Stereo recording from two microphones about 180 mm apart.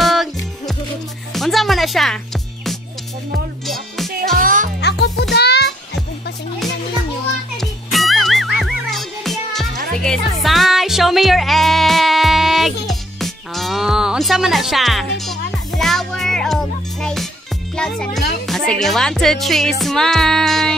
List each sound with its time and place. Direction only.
0.0 s music: centre (ahead or behind)
3.3 s music: centre (ahead or behind)
4.4 s music: 50° right (ahead or behind)
4.7 s music: 70° left (ahead or behind)
7.5 s music: centre (ahead or behind)
17.7 s speech: 5° left (ahead or behind)
18.5 s music: centre (ahead or behind)